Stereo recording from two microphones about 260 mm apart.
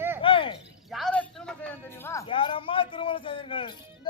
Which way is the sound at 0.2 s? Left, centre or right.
Centre.